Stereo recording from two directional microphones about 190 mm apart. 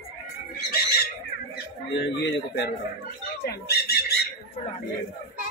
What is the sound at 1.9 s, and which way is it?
Speech, 65° left (ahead or behind).